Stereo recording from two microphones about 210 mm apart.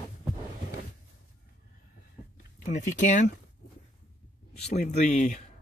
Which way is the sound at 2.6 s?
35° left (ahead or behind).